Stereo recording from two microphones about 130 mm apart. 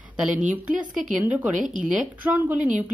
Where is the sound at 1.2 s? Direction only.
10° right (ahead or behind).